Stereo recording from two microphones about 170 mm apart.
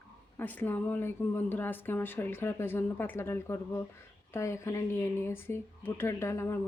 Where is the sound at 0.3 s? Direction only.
10° left (ahead or behind).